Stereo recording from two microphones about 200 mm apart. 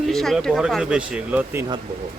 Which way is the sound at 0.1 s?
Centre (ahead or behind).